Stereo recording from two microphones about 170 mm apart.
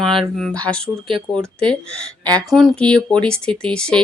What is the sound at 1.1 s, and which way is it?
Speech, 30° right (ahead or behind).